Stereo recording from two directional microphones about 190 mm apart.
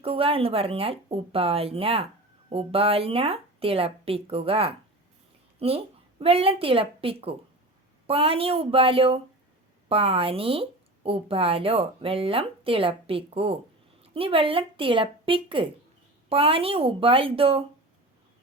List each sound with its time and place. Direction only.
0.0 s a woman's voice: 30° right (ahead or behind)